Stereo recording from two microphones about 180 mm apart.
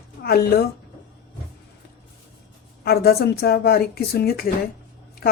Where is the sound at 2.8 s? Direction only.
60° left (ahead or behind).